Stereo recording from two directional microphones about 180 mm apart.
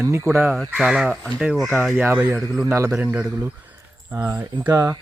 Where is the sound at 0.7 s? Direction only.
5° right (ahead or behind).